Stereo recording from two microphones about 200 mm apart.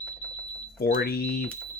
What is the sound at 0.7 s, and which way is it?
Speech, 50° left (ahead or behind).